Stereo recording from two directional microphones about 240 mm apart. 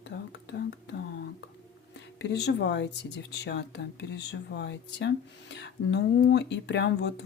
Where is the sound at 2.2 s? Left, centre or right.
Left.